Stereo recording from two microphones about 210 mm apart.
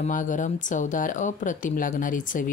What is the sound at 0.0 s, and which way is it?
Speech, 35° left (ahead or behind).